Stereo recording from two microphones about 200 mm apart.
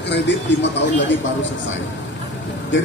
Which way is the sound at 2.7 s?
65° left (ahead or behind).